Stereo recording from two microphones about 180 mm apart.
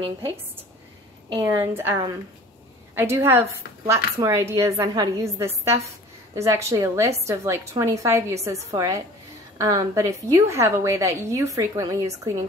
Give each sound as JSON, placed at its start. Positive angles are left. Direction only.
{"t": 1.3, "sound": "speech", "side_deg": -20}